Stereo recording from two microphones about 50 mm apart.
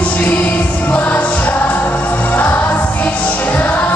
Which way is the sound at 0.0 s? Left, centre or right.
Left.